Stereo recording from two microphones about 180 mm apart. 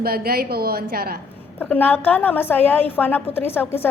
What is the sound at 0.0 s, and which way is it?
A woman's voice, 60° right (ahead or behind).